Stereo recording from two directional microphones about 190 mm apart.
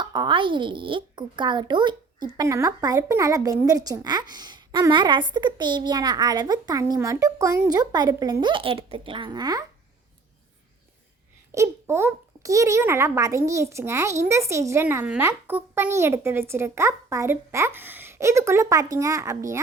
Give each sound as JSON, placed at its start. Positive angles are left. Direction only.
{"t": 0.0, "sound": "a child's voice", "side_deg": -25}
{"t": 11.5, "sound": "a child's voice", "side_deg": -15}